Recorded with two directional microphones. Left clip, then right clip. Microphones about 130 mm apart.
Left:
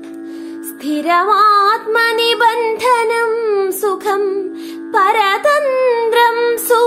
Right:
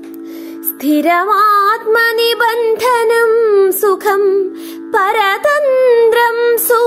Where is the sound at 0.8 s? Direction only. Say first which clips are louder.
Right 2 dB; 55° right (ahead or behind).